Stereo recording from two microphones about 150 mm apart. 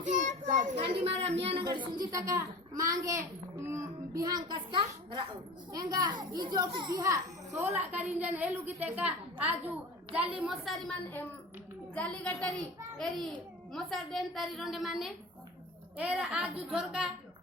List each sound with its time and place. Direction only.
0.0 s a child's voice: 55° right (ahead or behind)
1.6 s a child's voice: 30° right (ahead or behind)
7.6 s a woman's voice: 10° right (ahead or behind); by 12.5 s 10° left (ahead or behind)
13.7 s a woman's voice: centre (ahead or behind)